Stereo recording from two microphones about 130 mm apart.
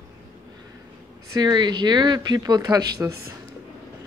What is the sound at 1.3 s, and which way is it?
Speech, 35° right (ahead or behind).